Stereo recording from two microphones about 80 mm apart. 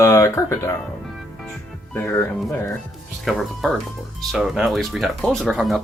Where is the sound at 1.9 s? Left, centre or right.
Left.